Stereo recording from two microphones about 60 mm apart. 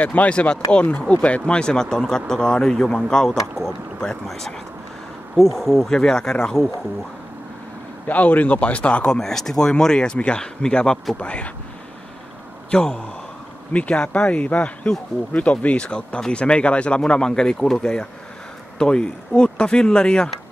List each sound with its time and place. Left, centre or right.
0.0 s speech: left; by 4.6 s centre
5.6 s speech: centre
8.1 s speech: left
12.7 s speech: centre